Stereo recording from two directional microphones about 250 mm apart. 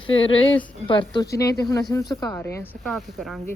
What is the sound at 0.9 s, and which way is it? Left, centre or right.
Speech, centre.